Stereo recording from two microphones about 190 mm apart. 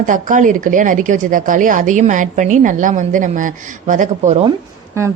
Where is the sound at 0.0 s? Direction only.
40° right (ahead or behind).